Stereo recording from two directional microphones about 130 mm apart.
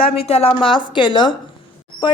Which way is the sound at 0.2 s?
50° left (ahead or behind).